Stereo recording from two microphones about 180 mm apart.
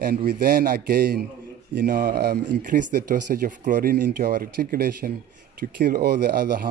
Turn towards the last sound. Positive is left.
turn(degrees=-60)  # may be behind; listen again after turning